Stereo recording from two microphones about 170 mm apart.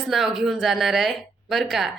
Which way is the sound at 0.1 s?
Centre (ahead or behind).